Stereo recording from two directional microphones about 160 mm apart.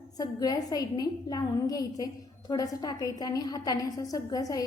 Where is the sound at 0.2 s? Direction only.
25° left (ahead or behind).